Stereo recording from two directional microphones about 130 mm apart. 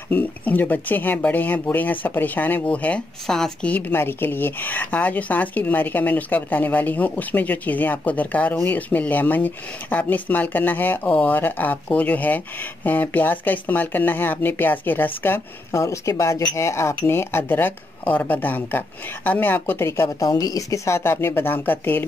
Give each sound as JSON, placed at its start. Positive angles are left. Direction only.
{"t": 0.1, "sound": "speech", "side_deg": 15}